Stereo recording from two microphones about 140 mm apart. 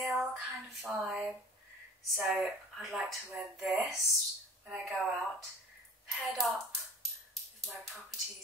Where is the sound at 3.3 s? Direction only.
10° right (ahead or behind).